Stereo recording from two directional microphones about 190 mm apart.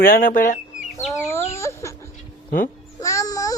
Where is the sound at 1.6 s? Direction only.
15° left (ahead or behind).